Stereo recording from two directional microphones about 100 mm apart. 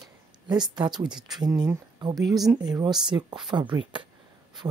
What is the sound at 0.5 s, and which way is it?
Speech, 45° right (ahead or behind).